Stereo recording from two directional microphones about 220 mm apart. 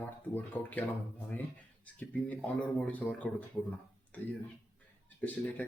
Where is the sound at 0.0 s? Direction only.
10° left (ahead or behind).